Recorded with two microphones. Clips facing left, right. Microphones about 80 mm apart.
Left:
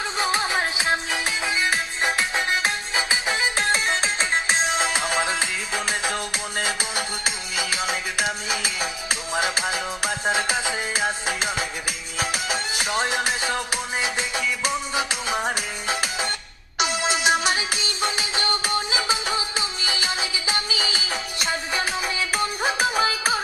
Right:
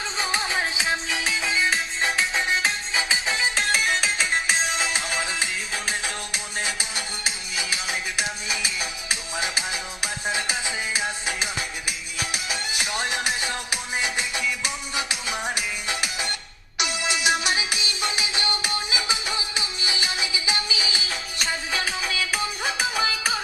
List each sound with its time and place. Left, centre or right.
0.2 s music: centre
3.6 s music: left